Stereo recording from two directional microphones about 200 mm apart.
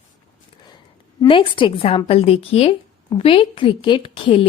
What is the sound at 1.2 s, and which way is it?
A woman's voice, 25° left (ahead or behind).